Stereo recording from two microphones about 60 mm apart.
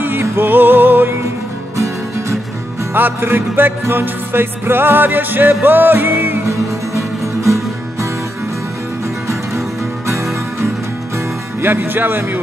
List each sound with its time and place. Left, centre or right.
0.0 s music: right
1.8 s music: right
2.9 s music: right
6.4 s music: right
11.6 s music: right